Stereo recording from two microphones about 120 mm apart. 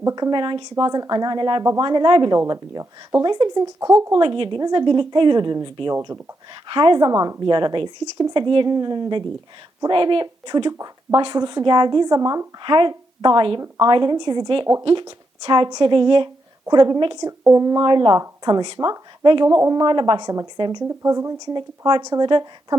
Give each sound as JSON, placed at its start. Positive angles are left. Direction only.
{"t": 0.0, "sound": "speech", "side_deg": -30}
{"t": 0.9, "sound": "speech", "side_deg": -30}
{"t": 4.2, "sound": "speech", "side_deg": -45}
{"t": 12.6, "sound": "a woman's voice", "side_deg": -40}
{"t": 19.5, "sound": "speech", "side_deg": -25}